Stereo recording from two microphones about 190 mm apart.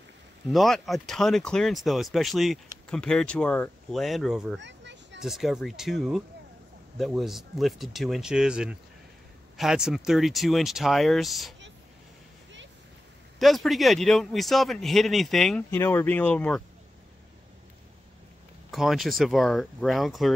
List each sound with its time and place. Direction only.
0.5 s speech: centre (ahead or behind)
4.6 s a sound: 70° right (ahead or behind)
5.2 s speech: centre (ahead or behind)
13.4 s speech: centre (ahead or behind)
15.7 s speech: 15° left (ahead or behind)
18.7 s speech: centre (ahead or behind)